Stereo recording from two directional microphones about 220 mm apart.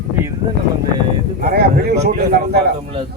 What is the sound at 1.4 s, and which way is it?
Speech, 45° right (ahead or behind).